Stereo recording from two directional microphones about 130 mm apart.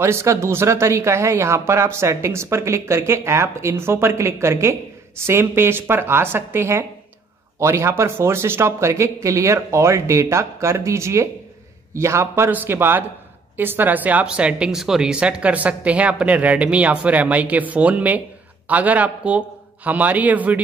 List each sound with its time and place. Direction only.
0.0 s speech: 20° right (ahead or behind)